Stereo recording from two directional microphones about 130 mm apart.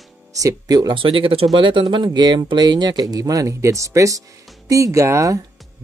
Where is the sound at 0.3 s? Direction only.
25° right (ahead or behind).